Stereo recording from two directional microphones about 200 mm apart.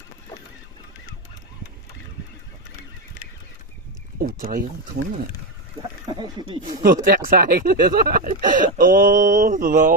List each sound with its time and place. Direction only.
4.2 s speech: 45° right (ahead or behind)
6.1 s speech: 25° right (ahead or behind)
6.6 s speech: 45° right (ahead or behind)